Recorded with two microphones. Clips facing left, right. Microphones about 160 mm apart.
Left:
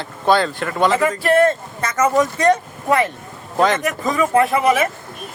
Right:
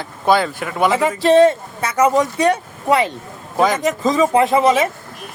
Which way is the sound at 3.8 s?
20° right (ahead or behind).